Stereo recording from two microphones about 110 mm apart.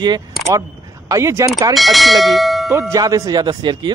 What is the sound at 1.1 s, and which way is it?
Speech, 25° right (ahead or behind).